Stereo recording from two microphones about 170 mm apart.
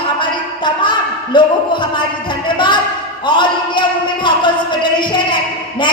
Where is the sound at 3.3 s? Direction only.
30° left (ahead or behind).